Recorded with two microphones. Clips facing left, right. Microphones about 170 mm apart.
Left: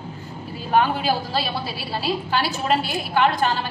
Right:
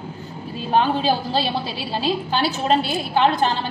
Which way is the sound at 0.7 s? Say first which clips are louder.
Right 1 dB; 30° right (ahead or behind).